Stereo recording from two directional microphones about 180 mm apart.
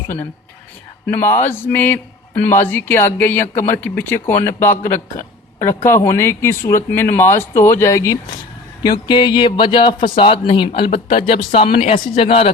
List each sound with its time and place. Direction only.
1.0 s a man's voice: 10° left (ahead or behind); by 12.5 s 30° left (ahead or behind)